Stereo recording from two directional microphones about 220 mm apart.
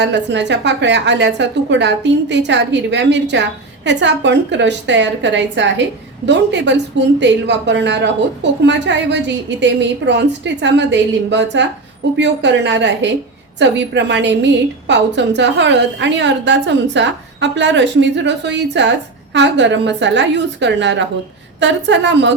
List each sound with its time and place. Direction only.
0.0 s a woman's voice: 50° right (ahead or behind)